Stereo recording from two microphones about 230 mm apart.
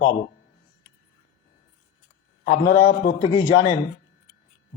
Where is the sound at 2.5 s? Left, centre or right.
Left.